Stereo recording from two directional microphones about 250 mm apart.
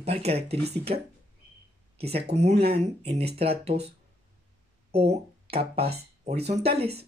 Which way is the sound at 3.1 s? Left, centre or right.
Right.